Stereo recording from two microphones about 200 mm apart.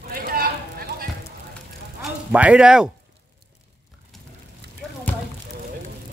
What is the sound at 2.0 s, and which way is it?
Speech, 5° right (ahead or behind).